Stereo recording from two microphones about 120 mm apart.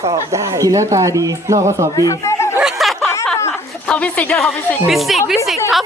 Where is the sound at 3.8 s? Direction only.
10° left (ahead or behind).